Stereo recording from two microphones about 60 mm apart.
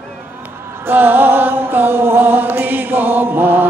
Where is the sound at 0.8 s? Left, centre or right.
Right.